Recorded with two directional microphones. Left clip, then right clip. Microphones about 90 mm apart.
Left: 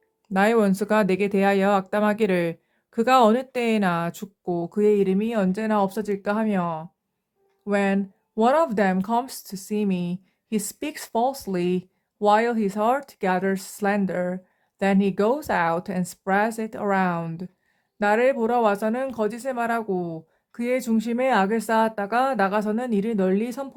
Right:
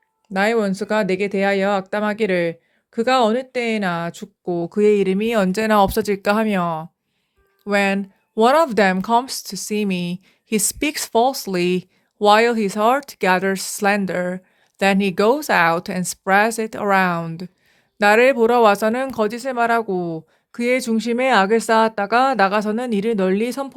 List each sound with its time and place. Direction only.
0.3 s speech: centre (ahead or behind)
4.4 s speech: 25° right (ahead or behind)
4.8 s speech: 40° right (ahead or behind)
7.6 s speech: 35° right (ahead or behind)
17.9 s speech: 45° right (ahead or behind)